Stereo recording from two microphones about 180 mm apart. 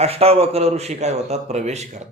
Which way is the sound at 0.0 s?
35° right (ahead or behind).